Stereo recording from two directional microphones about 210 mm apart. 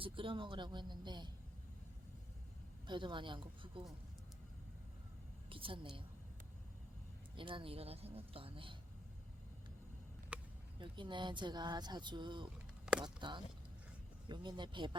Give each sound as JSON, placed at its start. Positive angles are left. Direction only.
{"t": 0.0, "sound": "speech", "side_deg": -25}
{"t": 2.8, "sound": "speech", "side_deg": -20}
{"t": 5.5, "sound": "speech", "side_deg": -25}
{"t": 7.3, "sound": "speech", "side_deg": -25}
{"t": 10.3, "sound": "a sound", "side_deg": -5}
{"t": 10.8, "sound": "speech", "side_deg": -25}